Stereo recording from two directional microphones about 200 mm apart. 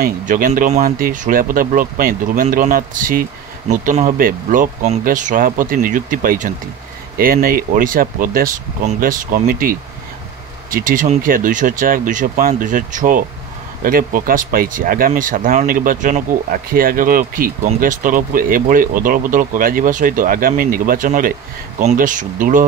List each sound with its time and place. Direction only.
0.0 s speech: 45° right (ahead or behind)